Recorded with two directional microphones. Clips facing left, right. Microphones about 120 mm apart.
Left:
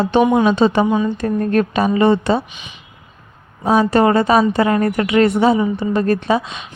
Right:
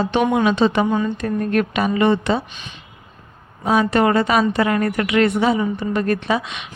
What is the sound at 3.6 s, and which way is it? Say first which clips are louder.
A woman's voice: left 3 dB; 35° left (ahead or behind).